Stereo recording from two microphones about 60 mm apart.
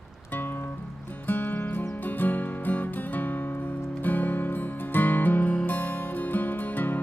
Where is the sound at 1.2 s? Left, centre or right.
Left.